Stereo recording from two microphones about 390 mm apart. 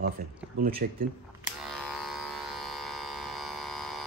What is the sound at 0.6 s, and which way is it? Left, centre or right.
Speech, right.